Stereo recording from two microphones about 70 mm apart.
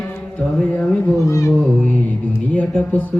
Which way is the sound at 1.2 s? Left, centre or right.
Left.